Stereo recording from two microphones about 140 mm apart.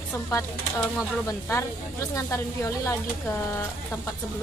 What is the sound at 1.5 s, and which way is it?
Speech, 20° left (ahead or behind).